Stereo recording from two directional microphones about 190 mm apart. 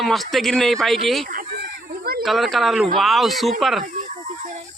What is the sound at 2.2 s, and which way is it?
A man's voice, centre (ahead or behind).